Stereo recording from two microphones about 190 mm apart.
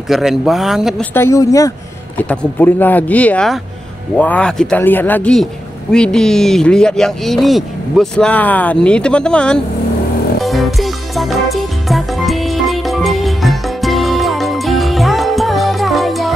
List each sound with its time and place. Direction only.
0.1 s speech: centre (ahead or behind)
1.1 s speech: 15° left (ahead or behind)
10.4 s music: centre (ahead or behind)